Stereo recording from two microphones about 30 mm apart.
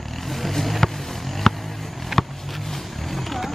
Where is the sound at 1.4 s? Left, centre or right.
Centre.